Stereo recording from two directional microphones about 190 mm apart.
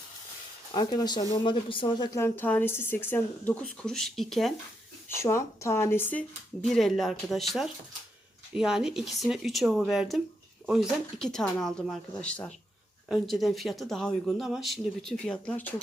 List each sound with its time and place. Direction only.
0.7 s speech: 20° left (ahead or behind); by 4.5 s centre (ahead or behind)
5.0 s speech: 15° left (ahead or behind)